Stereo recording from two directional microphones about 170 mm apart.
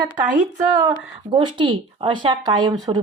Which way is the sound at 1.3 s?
30° right (ahead or behind).